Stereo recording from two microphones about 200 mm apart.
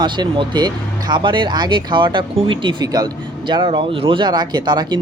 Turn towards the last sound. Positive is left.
turn(degrees=-20)  # may be behind; listen again after turning